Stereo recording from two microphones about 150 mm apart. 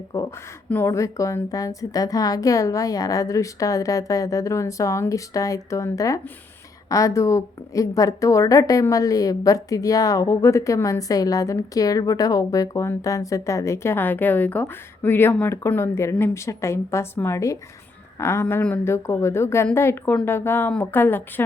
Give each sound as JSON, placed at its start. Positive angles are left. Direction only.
{"t": 0.1, "sound": "a woman's voice", "side_deg": 20}